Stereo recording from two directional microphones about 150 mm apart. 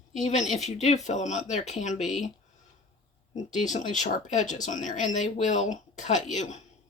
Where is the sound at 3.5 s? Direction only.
55° left (ahead or behind).